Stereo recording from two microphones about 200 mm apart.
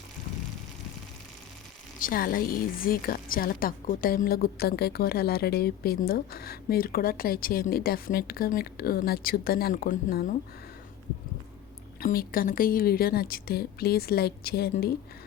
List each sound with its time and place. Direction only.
2.0 s a woman's voice: 45° left (ahead or behind)
11.9 s a woman's voice: 45° left (ahead or behind)